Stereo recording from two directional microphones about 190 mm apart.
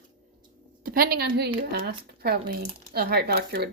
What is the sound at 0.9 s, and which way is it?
Speech, 55° right (ahead or behind).